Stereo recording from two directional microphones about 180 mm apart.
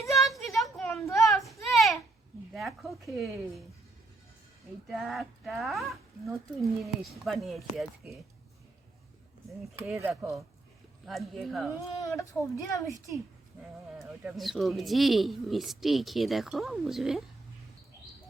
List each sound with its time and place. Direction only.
0.0 s a sound: centre (ahead or behind)
2.5 s a woman's voice: centre (ahead or behind)
4.9 s speech: centre (ahead or behind)
10.0 s speech: 10° right (ahead or behind)
11.9 s speech: 20° left (ahead or behind)
14.0 s speech: centre (ahead or behind)